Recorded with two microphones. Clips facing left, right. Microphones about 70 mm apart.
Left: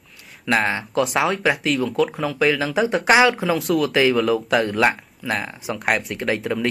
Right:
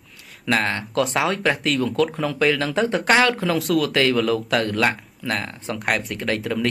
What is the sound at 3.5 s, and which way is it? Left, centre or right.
Speech, centre.